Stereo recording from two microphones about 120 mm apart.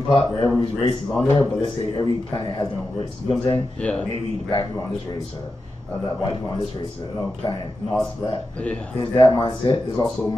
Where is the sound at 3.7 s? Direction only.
10° left (ahead or behind).